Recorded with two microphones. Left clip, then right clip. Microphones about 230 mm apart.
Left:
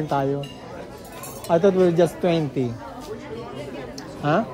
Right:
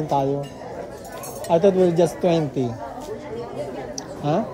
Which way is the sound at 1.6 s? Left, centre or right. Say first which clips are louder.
Even; centre.